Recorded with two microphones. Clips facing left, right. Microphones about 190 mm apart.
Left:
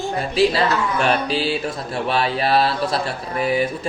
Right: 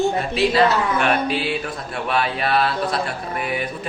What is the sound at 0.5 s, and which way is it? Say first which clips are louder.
Speech: right 2 dB; 35° left (ahead or behind).